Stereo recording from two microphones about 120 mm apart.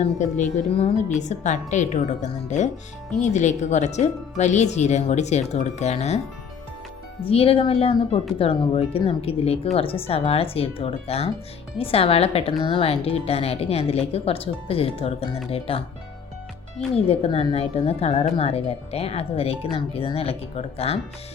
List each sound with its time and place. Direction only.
0.0 s a woman's voice: 75° left (ahead or behind)
7.2 s speech: 50° left (ahead or behind)
16.9 s speech: 55° left (ahead or behind)